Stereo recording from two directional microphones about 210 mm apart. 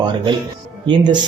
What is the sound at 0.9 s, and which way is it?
Speech, 20° right (ahead or behind).